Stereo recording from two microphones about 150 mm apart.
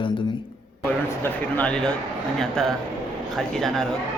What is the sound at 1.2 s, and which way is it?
Speech, 10° left (ahead or behind).